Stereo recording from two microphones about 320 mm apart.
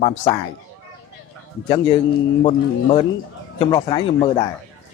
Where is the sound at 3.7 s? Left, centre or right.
Centre.